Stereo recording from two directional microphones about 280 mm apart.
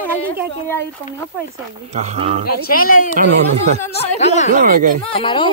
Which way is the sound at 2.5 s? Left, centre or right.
Left.